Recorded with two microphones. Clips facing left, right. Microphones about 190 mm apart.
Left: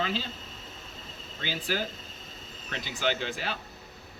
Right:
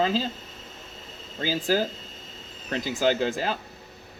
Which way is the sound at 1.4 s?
40° right (ahead or behind).